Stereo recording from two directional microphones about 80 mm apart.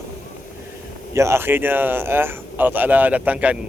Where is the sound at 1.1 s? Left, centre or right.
Right.